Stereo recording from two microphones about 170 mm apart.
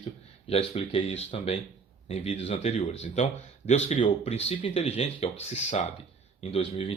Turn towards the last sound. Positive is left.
turn(degrees=35)  # may be behind; listen again after turning